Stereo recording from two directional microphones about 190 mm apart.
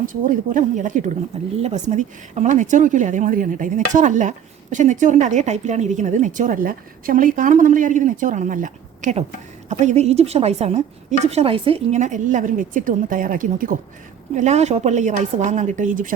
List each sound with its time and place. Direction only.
0.0 s a woman's voice: 45° right (ahead or behind)